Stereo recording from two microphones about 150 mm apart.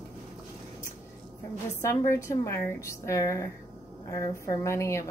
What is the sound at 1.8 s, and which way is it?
A woman's voice, 20° left (ahead or behind).